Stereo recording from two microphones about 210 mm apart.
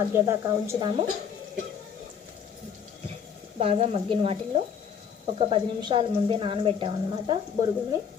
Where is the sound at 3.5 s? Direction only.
30° right (ahead or behind).